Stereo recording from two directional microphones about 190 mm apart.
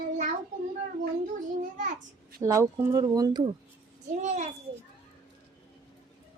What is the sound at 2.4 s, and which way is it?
A child's voice, 15° right (ahead or behind).